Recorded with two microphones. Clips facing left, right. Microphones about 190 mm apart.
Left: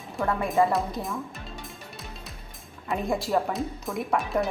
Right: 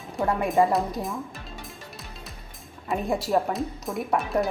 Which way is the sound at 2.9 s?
Centre (ahead or behind).